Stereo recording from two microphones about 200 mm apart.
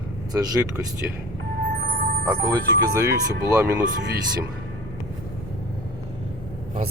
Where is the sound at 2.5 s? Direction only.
15° right (ahead or behind).